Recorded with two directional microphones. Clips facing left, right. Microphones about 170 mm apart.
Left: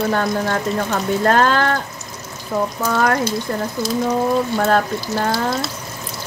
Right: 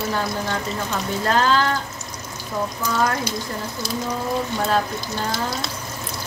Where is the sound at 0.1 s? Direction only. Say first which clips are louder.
Left 5 dB; 55° left (ahead or behind).